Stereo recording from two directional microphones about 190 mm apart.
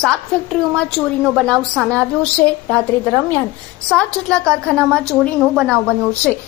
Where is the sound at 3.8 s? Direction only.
5° left (ahead or behind).